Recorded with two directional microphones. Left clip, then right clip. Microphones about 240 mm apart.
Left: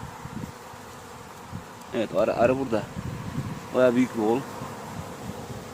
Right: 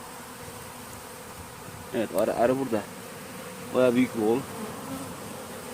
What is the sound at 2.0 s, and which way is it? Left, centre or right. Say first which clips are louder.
Speech: left 2 dB; centre.